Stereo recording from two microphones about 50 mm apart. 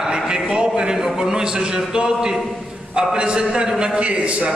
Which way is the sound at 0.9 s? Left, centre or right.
Centre.